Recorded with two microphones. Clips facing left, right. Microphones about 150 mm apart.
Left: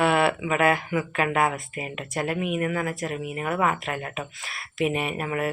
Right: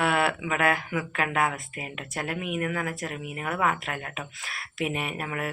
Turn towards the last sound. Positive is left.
turn(degrees=5)  # may be behind; listen again after turning